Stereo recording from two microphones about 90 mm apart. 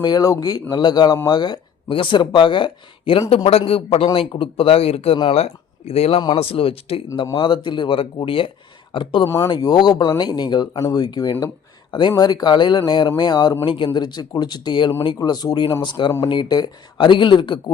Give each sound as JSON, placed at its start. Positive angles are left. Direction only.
{"t": 0.0, "sound": "speech", "side_deg": 45}
{"t": 1.9, "sound": "speech", "side_deg": 70}
{"t": 7.3, "sound": "speech", "side_deg": 65}
{"t": 9.5, "sound": "speech", "side_deg": 50}
{"t": 10.8, "sound": "speech", "side_deg": 45}
{"t": 11.9, "sound": "speech", "side_deg": 60}
{"t": 13.7, "sound": "speech", "side_deg": 70}
{"t": 15.8, "sound": "speech", "side_deg": 60}